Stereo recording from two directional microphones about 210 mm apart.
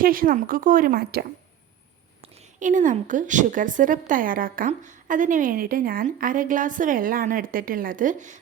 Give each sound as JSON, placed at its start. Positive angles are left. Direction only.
{"t": 0.0, "sound": "a woman's voice", "side_deg": -40}
{"t": 2.2, "sound": "a woman's voice", "side_deg": -30}